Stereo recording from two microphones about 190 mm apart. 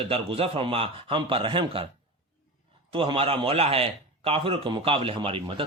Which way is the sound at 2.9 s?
30° right (ahead or behind).